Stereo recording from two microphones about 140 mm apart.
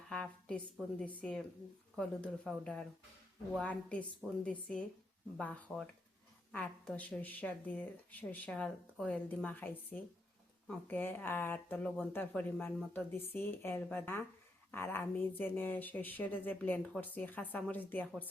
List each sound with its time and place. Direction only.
0.1 s speech: 5° left (ahead or behind)